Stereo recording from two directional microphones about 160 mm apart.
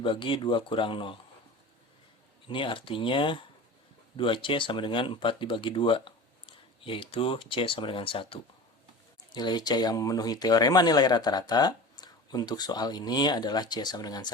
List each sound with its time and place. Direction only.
0.0 s speech: 30° left (ahead or behind)
2.5 s speech: 30° left (ahead or behind)